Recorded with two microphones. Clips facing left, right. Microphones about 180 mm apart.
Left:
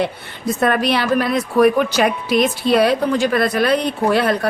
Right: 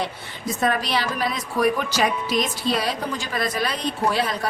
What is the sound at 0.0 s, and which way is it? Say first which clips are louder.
A woman's voice: left 7 dB; 60° left (ahead or behind).